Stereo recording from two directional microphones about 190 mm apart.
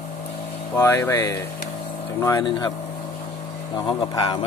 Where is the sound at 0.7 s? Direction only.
15° left (ahead or behind).